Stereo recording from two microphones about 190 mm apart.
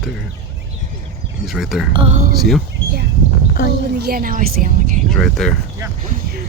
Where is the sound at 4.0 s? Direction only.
50° right (ahead or behind).